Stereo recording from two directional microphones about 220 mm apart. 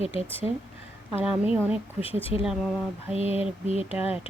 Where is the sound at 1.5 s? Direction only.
5° right (ahead or behind).